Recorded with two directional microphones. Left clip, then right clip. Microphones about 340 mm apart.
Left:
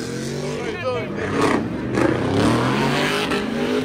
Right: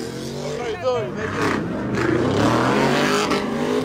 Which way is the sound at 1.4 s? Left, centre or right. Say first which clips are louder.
Left 3 dB; centre.